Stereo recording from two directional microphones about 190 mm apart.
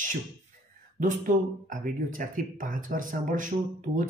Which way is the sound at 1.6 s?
45° right (ahead or behind).